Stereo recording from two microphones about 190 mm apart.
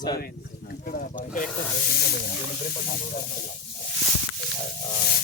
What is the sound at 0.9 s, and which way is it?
Speech, 45° left (ahead or behind).